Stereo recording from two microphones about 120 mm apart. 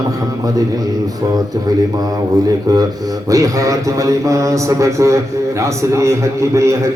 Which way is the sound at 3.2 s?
25° right (ahead or behind).